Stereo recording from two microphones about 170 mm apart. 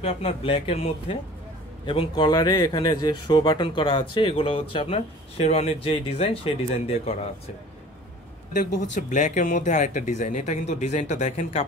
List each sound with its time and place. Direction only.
0.0 s speech: 35° left (ahead or behind)
8.9 s speech: 45° left (ahead or behind)